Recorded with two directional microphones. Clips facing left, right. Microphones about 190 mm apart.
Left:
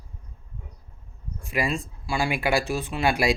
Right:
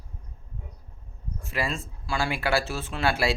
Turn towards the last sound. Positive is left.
turn(degrees=15)  # may be behind; listen again after turning